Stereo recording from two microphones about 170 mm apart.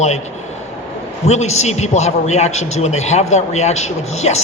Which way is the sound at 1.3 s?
40° left (ahead or behind).